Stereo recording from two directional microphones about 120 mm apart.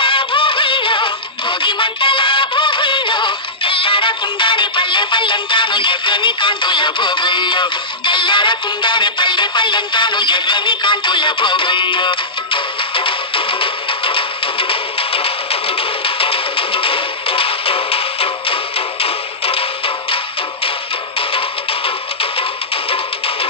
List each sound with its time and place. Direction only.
0.0 s music: 45° left (ahead or behind)
21.3 s music: 50° left (ahead or behind)